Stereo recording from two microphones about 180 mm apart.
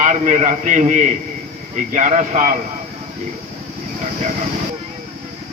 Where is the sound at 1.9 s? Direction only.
40° right (ahead or behind).